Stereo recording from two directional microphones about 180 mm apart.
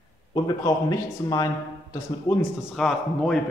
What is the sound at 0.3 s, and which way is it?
A man's voice, 20° left (ahead or behind).